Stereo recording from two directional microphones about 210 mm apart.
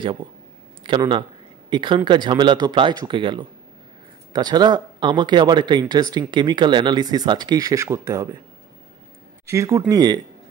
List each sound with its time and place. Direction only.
0.0 s speech: 20° right (ahead or behind)
9.5 s speech: 15° right (ahead or behind)